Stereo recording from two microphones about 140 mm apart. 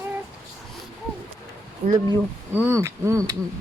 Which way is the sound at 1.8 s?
55° right (ahead or behind).